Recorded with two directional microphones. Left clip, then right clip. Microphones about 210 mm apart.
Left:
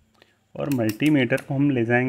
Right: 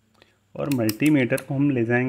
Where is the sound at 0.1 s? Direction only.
Centre (ahead or behind).